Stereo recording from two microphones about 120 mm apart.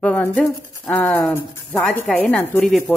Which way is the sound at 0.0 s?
10° left (ahead or behind).